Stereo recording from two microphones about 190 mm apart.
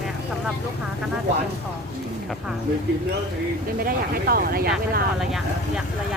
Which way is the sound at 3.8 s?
50° right (ahead or behind).